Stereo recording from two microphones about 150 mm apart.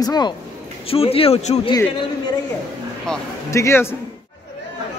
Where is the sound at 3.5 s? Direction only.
20° left (ahead or behind).